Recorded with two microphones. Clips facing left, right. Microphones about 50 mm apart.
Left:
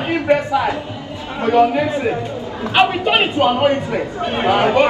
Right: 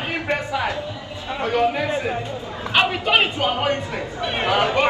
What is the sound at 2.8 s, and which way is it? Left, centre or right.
Speech, centre.